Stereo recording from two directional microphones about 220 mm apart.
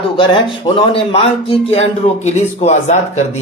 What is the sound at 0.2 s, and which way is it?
A man's voice, 20° left (ahead or behind).